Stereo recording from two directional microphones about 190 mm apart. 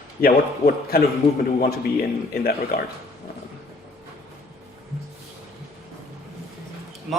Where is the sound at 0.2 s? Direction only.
50° left (ahead or behind).